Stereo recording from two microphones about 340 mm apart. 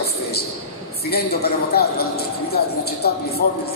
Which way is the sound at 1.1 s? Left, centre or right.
Left.